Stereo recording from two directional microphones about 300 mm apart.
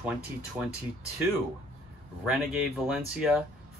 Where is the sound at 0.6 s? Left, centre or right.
Centre.